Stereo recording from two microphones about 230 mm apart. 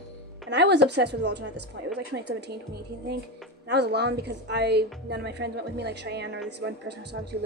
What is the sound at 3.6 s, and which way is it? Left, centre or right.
Speech, right.